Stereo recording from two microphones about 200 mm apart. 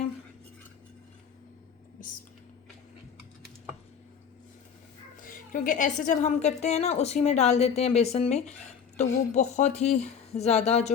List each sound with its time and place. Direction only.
5.2 s a woman's voice: 45° left (ahead or behind)